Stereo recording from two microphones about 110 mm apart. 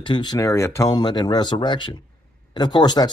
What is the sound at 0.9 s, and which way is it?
Speech, 40° left (ahead or behind).